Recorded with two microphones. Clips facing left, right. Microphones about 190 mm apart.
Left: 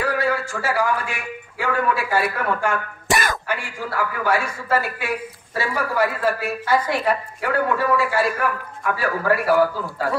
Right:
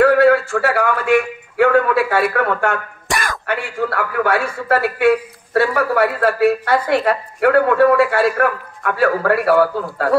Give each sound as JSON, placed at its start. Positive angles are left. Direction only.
{"t": 0.0, "sound": "a man's voice", "side_deg": -60}
{"t": 3.1, "sound": "cough", "side_deg": 0}
{"t": 3.4, "sound": "a man's voice", "side_deg": -60}